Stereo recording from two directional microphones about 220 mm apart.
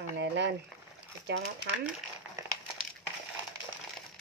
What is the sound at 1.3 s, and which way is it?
Speech, 50° right (ahead or behind).